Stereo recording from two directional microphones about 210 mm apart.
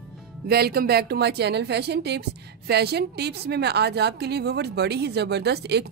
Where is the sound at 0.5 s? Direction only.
45° right (ahead or behind).